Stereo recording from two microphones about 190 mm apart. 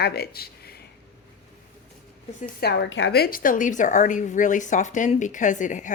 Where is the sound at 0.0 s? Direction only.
55° left (ahead or behind).